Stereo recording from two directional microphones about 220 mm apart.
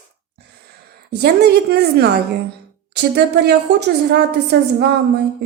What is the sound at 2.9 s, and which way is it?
A woman's voice, 50° right (ahead or behind).